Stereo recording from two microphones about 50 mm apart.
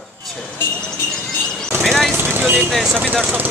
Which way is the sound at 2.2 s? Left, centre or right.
Right.